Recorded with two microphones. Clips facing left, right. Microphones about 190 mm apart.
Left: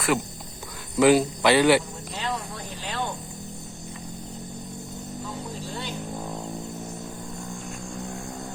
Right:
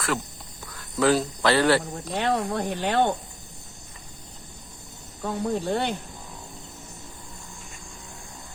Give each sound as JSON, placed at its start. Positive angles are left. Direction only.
{"t": 0.9, "sound": "speech", "side_deg": 15}
{"t": 2.1, "sound": "speech", "side_deg": -60}
{"t": 5.2, "sound": "speech", "side_deg": -60}